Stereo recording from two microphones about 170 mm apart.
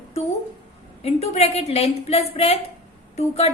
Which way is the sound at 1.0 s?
40° left (ahead or behind).